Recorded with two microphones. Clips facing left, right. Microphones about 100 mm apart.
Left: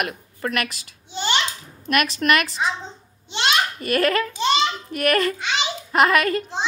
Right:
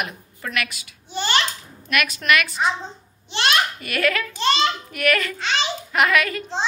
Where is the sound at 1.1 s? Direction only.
20° left (ahead or behind).